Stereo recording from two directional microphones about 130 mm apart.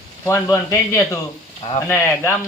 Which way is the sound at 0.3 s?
20° left (ahead or behind).